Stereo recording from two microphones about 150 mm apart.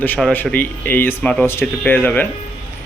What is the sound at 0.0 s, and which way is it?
Speech, 10° left (ahead or behind).